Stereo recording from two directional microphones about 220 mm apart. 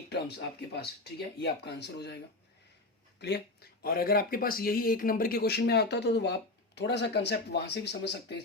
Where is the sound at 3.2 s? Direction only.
50° left (ahead or behind).